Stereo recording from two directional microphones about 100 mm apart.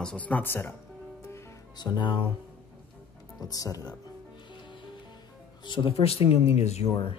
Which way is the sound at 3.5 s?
35° left (ahead or behind).